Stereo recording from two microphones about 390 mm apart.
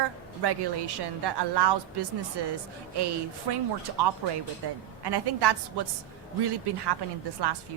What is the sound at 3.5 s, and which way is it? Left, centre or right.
A woman's voice, right.